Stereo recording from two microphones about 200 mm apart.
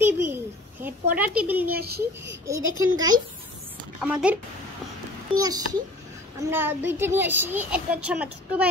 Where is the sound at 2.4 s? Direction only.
15° right (ahead or behind).